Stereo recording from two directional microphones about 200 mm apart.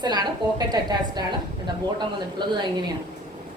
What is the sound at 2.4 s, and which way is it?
Speech, 20° right (ahead or behind).